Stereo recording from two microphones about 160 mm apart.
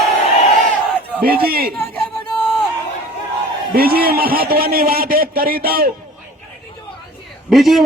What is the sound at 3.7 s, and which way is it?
A man's voice, 70° right (ahead or behind).